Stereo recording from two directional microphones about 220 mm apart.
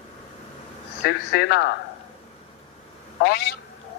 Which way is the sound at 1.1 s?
50° left (ahead or behind).